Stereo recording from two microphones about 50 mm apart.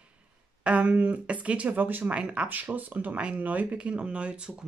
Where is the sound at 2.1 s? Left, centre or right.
Right.